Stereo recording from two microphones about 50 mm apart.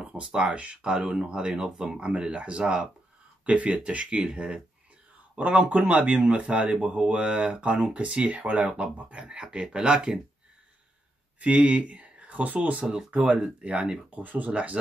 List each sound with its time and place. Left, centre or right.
0.2 s speech: centre
5.4 s speech: right
11.3 s speech: right